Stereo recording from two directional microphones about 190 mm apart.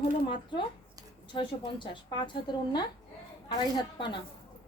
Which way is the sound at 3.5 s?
25° left (ahead or behind).